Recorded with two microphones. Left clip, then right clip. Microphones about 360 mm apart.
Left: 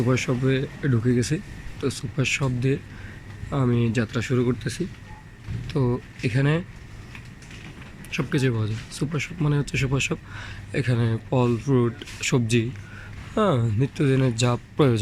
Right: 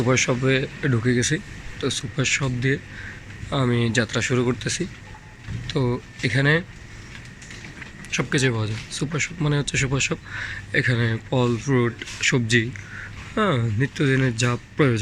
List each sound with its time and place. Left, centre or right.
0.0 s speech: centre
8.1 s speech: centre